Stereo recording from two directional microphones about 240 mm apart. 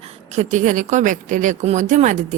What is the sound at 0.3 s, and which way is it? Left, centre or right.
A woman's voice, right.